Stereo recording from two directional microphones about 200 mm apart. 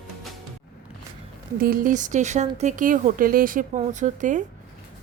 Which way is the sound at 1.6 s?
45° right (ahead or behind).